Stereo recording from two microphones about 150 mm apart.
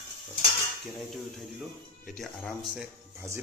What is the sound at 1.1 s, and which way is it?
Speech, centre (ahead or behind).